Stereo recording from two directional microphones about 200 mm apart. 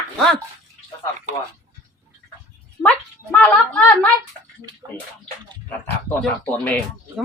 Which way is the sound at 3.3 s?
5° left (ahead or behind).